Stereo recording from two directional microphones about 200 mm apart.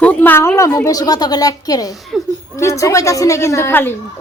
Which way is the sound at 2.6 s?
15° left (ahead or behind).